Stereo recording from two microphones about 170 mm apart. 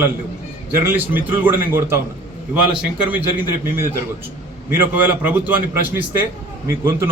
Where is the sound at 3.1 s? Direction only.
10° right (ahead or behind).